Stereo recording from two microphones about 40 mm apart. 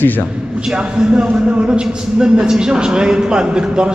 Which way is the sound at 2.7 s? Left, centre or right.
Right.